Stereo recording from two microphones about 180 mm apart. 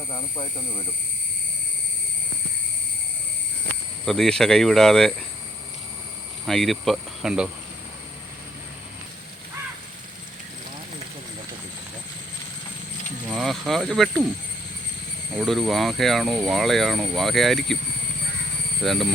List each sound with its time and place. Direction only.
0.1 s speech: 30° left (ahead or behind)
4.0 s speech: centre (ahead or behind)
6.4 s speech: centre (ahead or behind)
13.2 s speech: centre (ahead or behind)
15.4 s speech: centre (ahead or behind)
18.8 s speech: centre (ahead or behind)